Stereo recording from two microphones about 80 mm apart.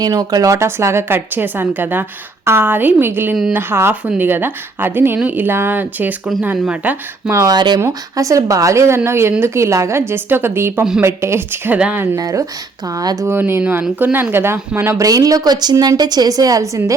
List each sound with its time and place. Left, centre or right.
0.0 s a woman's voice: right; by 6.9 s centre
7.4 s speech: right
7.8 s a woman's voice: right
12.1 s a woman's voice: right
13.2 s a woman's voice: right
14.9 s a woman's voice: right